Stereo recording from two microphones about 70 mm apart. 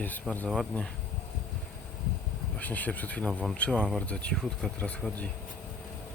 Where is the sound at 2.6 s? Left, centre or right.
Left.